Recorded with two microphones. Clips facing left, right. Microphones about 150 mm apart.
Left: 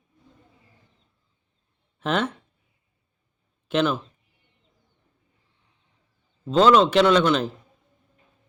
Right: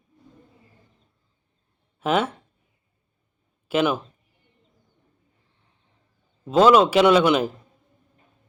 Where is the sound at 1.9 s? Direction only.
5° right (ahead or behind).